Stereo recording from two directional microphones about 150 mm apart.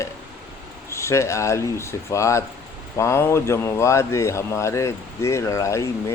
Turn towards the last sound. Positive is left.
turn(degrees=20)  # may be behind; listen again after turning